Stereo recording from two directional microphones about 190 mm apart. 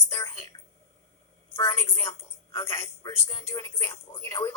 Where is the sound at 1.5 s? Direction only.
15° left (ahead or behind).